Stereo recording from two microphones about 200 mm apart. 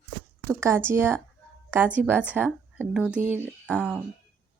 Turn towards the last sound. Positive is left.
turn(degrees=-5)  # may be behind; listen again after turning